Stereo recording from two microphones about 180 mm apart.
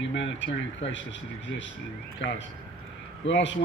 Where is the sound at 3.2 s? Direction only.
90° left.